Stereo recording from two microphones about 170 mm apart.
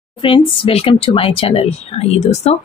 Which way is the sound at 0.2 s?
30° left (ahead or behind).